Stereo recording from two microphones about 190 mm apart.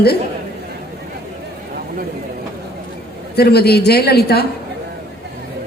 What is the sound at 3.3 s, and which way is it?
A woman's voice, 55° left (ahead or behind).